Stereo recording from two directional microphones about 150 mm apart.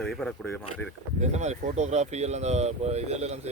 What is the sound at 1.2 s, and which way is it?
Speech, 50° right (ahead or behind).